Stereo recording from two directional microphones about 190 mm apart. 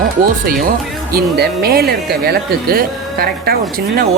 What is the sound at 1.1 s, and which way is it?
Speech, 55° right (ahead or behind).